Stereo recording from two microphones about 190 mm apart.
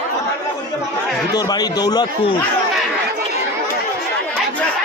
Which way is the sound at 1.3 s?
20° left (ahead or behind).